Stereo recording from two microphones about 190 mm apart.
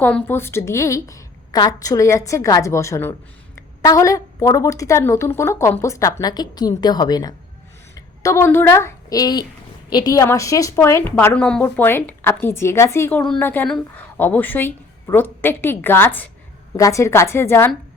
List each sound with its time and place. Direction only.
0.0 s a woman's voice: 5° left (ahead or behind)